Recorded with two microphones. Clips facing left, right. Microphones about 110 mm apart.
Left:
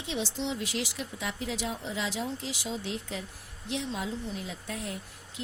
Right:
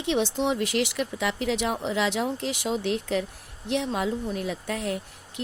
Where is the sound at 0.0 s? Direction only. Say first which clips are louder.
Right 8 dB; 65° right (ahead or behind).